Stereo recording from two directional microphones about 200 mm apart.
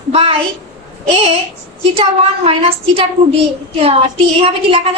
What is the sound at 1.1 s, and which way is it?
Speech, 30° right (ahead or behind).